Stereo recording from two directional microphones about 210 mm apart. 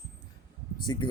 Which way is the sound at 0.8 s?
20° left (ahead or behind).